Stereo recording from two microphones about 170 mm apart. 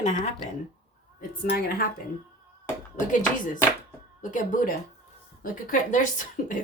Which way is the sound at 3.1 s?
50° left (ahead or behind).